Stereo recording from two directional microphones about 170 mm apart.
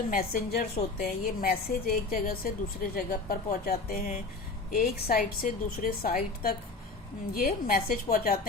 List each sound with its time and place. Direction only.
0.1 s a woman's voice: 60° left (ahead or behind)